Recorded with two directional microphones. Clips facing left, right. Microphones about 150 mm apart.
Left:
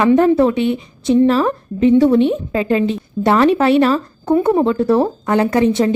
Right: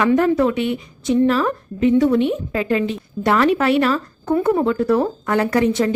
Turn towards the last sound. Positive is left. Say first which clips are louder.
# left 3 dB
turn(degrees=25)  # may be behind; listen again after turning